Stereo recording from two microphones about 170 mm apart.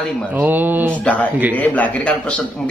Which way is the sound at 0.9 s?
10° left (ahead or behind).